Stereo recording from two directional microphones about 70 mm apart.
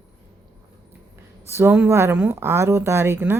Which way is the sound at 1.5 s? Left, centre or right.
Right.